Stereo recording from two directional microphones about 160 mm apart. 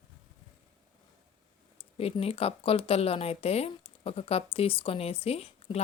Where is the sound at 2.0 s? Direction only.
40° left (ahead or behind).